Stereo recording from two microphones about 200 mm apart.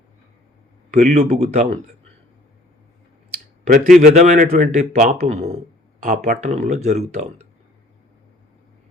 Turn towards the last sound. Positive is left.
turn(degrees=-35)  # may be behind; listen again after turning